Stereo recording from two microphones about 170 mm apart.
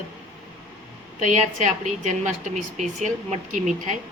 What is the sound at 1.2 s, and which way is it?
A woman's voice, 45° right (ahead or behind).